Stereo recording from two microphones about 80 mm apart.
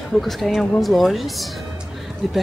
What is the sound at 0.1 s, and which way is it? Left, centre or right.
Speech, centre.